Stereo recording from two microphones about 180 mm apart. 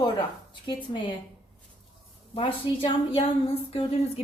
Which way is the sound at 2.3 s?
30° left (ahead or behind).